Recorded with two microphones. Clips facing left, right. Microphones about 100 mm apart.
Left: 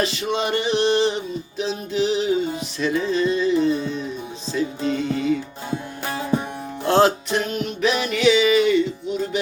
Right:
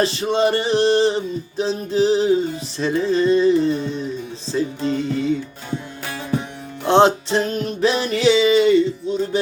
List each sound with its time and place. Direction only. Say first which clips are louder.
0.0 s music: right 5 dB; 35° right (ahead or behind)
6.8 s music: right 3 dB; 25° right (ahead or behind)